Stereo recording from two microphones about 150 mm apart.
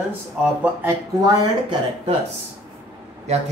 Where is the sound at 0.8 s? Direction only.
25° right (ahead or behind).